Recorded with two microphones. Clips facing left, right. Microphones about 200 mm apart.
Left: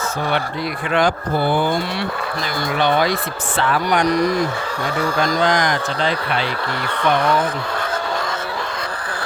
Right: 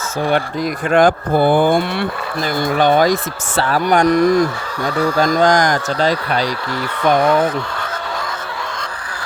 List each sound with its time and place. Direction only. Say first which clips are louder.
0.9 s speech: right 6 dB; 50° right (ahead or behind)